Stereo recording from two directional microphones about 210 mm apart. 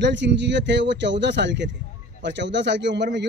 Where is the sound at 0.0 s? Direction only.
55° right (ahead or behind).